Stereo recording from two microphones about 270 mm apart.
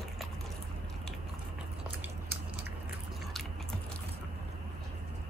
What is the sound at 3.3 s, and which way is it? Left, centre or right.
Biting, centre.